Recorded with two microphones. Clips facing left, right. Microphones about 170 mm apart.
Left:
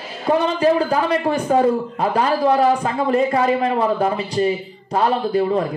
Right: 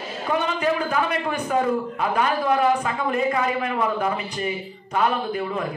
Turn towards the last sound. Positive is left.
turn(degrees=35)  # may be behind; listen again after turning